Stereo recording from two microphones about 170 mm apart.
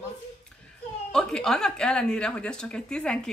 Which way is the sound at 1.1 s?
5° left (ahead or behind).